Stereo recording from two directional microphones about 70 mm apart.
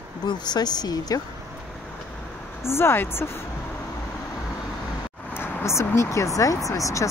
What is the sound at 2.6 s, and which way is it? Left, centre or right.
Speech, left.